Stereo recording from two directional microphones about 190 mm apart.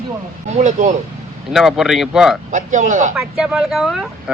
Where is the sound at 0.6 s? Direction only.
40° right (ahead or behind).